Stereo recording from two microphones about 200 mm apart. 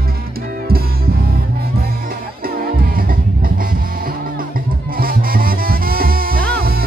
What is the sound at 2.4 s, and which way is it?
Music, 45° right (ahead or behind).